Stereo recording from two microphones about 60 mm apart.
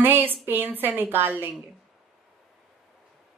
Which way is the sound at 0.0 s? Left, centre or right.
Right.